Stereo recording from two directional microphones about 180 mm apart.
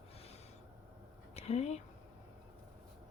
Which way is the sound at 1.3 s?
35° left (ahead or behind).